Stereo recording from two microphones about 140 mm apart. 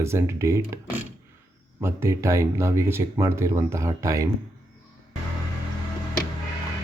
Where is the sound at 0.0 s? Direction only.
20° right (ahead or behind).